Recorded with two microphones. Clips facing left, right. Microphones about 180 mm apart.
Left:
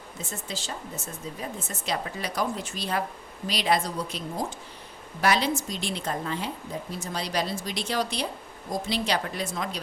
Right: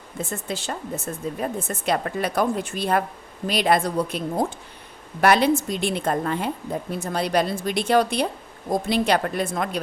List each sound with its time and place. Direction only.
0.2 s speech: 55° right (ahead or behind)